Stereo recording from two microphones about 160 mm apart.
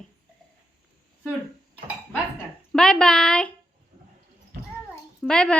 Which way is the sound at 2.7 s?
5° left (ahead or behind).